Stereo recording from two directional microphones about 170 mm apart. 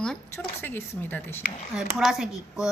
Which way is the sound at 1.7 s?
Centre (ahead or behind).